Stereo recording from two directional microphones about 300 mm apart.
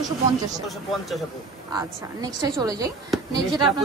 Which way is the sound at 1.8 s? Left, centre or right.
Centre.